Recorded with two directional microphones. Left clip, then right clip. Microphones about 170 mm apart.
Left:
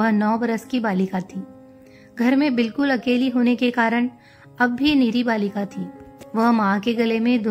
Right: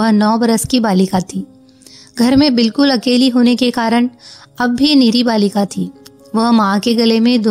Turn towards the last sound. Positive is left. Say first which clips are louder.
# right 8 dB
turn(degrees=-40)  # may be behind; listen again after turning